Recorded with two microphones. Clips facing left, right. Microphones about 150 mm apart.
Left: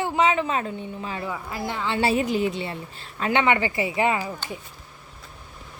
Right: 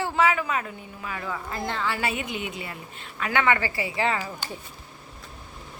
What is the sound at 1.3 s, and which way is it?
A woman's voice, 10° left (ahead or behind).